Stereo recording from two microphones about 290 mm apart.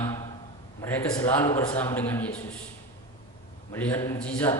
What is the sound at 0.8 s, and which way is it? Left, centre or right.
A man's voice, centre.